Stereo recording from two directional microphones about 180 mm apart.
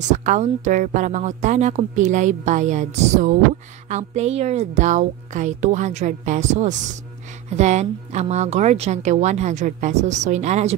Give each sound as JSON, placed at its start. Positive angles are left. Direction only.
{"t": 0.1, "sound": "speech", "side_deg": -45}